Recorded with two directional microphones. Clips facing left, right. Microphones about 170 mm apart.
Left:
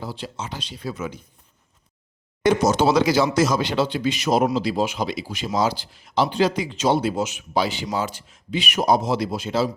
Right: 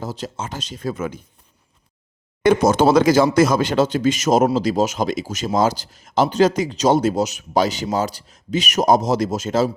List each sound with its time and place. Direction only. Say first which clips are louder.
0.0 s speech: right 4 dB; 45° right (ahead or behind)
2.4 s a man's voice: right 3 dB; 55° right (ahead or behind)